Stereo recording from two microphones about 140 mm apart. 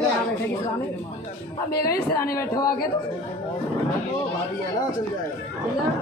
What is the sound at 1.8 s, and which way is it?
Speech, 20° left (ahead or behind).